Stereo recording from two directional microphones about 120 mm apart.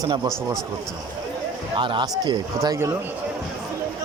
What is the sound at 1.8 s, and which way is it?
Speech, 40° right (ahead or behind).